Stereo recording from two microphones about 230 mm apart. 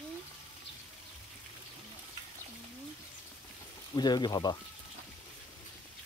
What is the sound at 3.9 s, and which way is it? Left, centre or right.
Speech, centre.